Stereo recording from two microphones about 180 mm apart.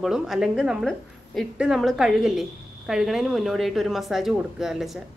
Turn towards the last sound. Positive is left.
turn(degrees=0)  # may be behind; listen again after turning